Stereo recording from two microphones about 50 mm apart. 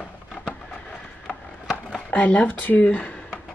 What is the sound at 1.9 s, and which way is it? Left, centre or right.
Speech, left.